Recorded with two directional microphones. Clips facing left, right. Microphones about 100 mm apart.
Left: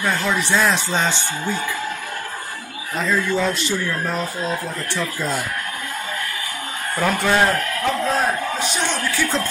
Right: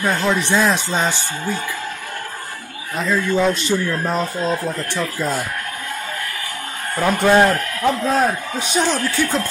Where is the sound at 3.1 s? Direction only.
15° right (ahead or behind).